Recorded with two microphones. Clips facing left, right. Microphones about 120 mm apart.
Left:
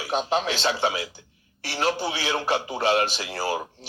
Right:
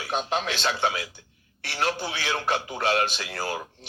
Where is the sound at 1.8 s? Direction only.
35° left (ahead or behind).